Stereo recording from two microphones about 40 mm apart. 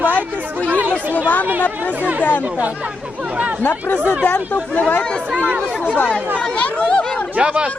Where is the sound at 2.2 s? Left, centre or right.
Left.